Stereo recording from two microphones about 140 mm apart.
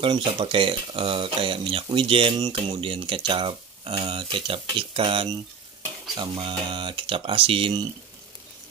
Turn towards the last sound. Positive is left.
turn(degrees=-40)  # may be behind; listen again after turning